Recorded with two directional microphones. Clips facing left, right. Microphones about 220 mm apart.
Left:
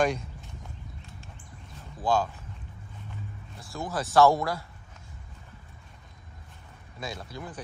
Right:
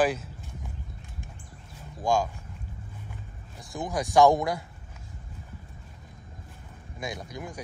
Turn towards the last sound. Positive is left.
turn(degrees=-15)  # may be behind; listen again after turning